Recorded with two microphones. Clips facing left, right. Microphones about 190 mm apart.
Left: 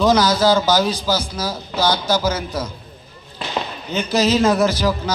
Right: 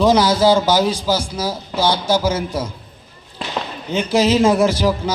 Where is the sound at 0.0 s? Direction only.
25° right (ahead or behind).